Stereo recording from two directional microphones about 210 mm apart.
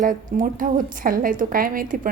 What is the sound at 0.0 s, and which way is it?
A woman's voice, 40° right (ahead or behind).